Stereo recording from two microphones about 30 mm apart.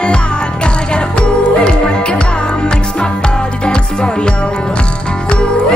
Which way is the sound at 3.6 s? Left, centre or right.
Left.